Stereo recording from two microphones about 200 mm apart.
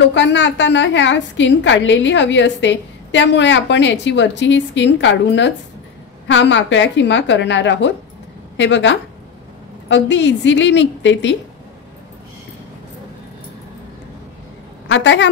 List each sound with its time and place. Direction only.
0.1 s a woman's voice: 60° left (ahead or behind)
14.9 s a woman's voice: 65° left (ahead or behind)